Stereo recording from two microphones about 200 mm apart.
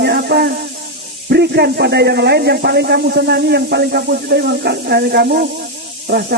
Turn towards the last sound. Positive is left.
turn(degrees=-55)  # may be behind; listen again after turning